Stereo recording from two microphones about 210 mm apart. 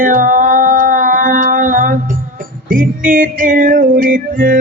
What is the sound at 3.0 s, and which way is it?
Music, 40° right (ahead or behind).